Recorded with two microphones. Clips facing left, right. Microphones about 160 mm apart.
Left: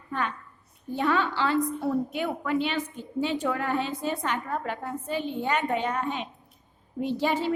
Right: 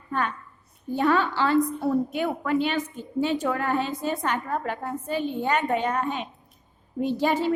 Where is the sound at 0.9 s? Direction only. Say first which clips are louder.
Right 3 dB; 45° right (ahead or behind).